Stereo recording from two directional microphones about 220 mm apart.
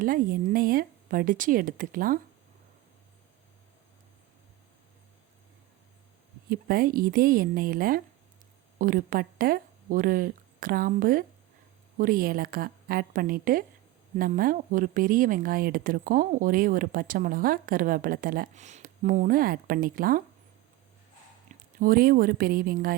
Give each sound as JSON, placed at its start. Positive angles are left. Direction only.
{"t": 0.0, "sound": "speech", "side_deg": -40}
{"t": 6.5, "sound": "speech", "side_deg": -40}
{"t": 21.8, "sound": "speech", "side_deg": -40}